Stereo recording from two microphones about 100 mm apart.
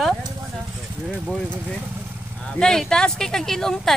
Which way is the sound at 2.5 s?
5° left (ahead or behind).